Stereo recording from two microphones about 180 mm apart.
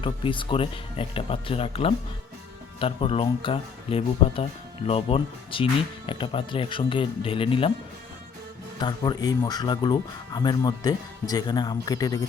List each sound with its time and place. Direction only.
0.0 s speech: 30° left (ahead or behind)
8.8 s speech: 25° left (ahead or behind)